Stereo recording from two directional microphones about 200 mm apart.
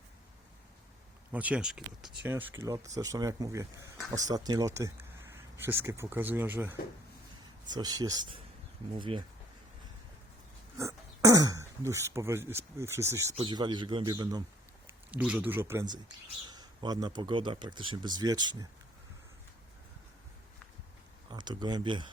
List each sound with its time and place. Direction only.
1.3 s speech: 5° right (ahead or behind); by 9.2 s 25° right (ahead or behind)
10.8 s speech: 15° right (ahead or behind)
13.3 s speech: 25° right (ahead or behind)
15.1 s speech: 5° right (ahead or behind)
21.2 s speech: 20° right (ahead or behind)